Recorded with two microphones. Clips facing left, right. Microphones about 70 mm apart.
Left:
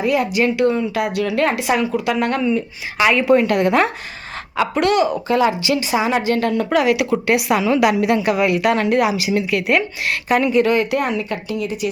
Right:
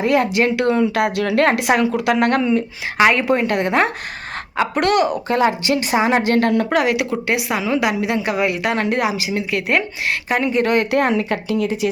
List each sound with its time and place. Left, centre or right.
0.0 s a woman's voice: right
6.2 s a woman's voice: right
6.7 s speech: right
7.6 s a woman's voice: centre
8.6 s speech: right
10.2 s a woman's voice: right
10.7 s speech: right